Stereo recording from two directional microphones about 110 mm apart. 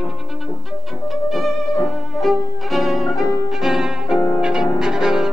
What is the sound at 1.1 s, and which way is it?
Music, centre (ahead or behind).